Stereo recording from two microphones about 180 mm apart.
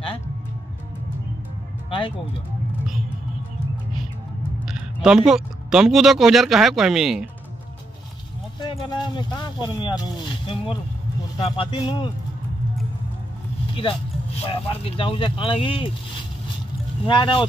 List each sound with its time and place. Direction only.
1.9 s speech: 30° left (ahead or behind)
4.6 s speech: 5° right (ahead or behind)
8.5 s speech: 25° left (ahead or behind)
14.4 s speech: 30° left (ahead or behind)
17.0 s speech: 25° left (ahead or behind)